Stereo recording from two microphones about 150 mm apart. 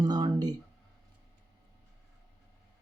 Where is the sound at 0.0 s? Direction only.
25° right (ahead or behind).